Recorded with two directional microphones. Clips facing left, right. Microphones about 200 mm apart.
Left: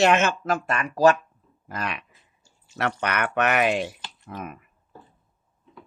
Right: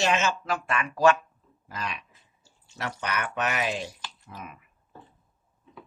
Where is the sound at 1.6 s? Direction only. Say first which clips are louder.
Left 4 dB; 55° left (ahead or behind).